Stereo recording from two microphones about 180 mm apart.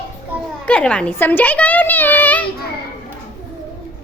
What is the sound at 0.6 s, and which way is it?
A child's voice, 10° left (ahead or behind).